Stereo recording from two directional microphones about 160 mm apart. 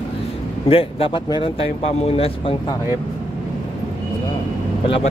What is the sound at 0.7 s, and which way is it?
Speech, 35° left (ahead or behind).